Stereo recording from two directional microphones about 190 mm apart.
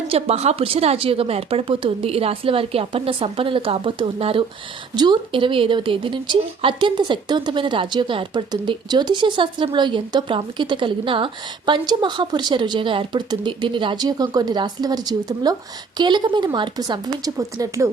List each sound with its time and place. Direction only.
0.1 s a woman's voice: 35° right (ahead or behind); by 17.8 s 15° right (ahead or behind)